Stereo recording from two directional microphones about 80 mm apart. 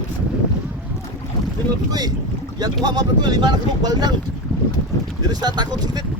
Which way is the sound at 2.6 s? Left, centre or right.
Right.